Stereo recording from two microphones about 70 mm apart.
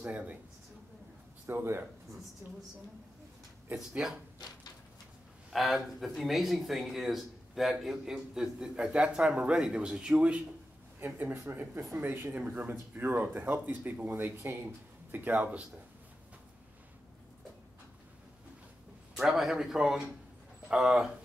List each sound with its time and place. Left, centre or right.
0.0 s speech: right
1.5 s speech: right
3.7 s speech: centre
5.5 s speech: centre
11.0 s speech: right
19.1 s a man's voice: centre